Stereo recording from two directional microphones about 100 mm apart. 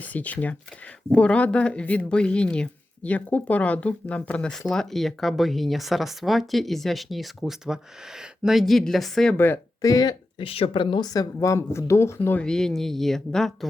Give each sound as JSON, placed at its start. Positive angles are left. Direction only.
{"t": 0.0, "sound": "speech", "side_deg": 15}
{"t": 9.8, "sound": "speech", "side_deg": 40}
{"t": 10.3, "sound": "speech", "side_deg": 70}
{"t": 11.1, "sound": "speech", "side_deg": 35}
{"t": 12.4, "sound": "speech", "side_deg": 5}